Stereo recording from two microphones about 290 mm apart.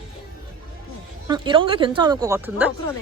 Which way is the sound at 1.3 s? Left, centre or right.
Centre.